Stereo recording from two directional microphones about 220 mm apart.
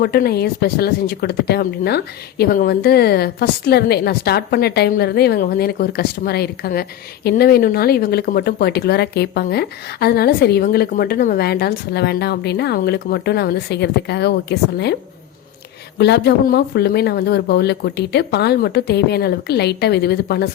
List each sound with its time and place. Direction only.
0.0 s speech: 45° left (ahead or behind)
16.0 s speech: 50° left (ahead or behind)